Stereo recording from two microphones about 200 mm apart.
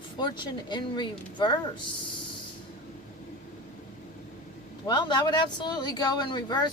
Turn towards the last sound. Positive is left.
turn(degrees=20)  # may be behind; listen again after turning